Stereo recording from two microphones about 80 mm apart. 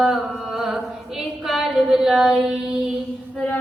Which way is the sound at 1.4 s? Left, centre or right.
Centre.